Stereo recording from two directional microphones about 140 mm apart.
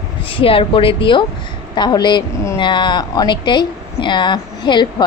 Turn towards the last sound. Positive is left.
turn(degrees=35)  # may be behind; listen again after turning